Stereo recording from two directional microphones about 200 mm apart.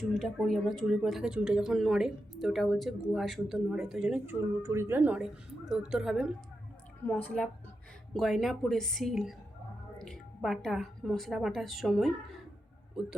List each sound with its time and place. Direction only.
0.0 s a woman's voice: centre (ahead or behind)